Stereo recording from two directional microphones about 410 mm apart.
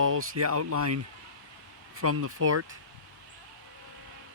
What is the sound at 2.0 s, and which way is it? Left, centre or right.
Speech, right.